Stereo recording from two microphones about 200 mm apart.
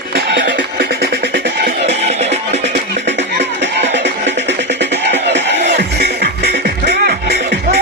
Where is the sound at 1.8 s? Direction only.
35° right (ahead or behind).